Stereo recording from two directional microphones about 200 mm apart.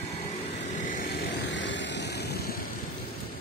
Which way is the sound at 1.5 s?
65° left (ahead or behind).